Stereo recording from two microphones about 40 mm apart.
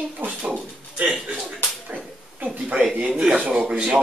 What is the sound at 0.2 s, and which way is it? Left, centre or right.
Speech, right.